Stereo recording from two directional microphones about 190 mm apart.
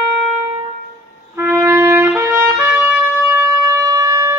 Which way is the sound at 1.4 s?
15° right (ahead or behind).